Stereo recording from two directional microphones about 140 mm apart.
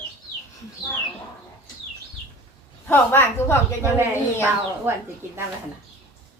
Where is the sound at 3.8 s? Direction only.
15° right (ahead or behind).